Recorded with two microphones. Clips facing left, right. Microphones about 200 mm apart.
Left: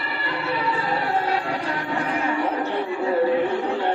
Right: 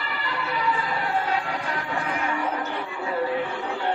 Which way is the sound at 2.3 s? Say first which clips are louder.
Left 5 dB; 35° left (ahead or behind).